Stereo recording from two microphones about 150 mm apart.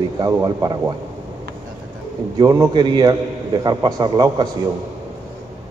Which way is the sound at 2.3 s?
20° right (ahead or behind).